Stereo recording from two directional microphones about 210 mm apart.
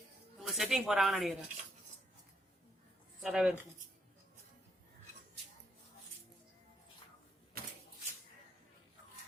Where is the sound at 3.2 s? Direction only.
Centre (ahead or behind).